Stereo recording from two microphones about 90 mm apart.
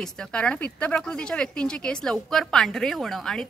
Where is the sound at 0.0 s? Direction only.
10° left (ahead or behind).